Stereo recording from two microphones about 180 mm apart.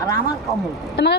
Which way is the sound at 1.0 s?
65° left (ahead or behind).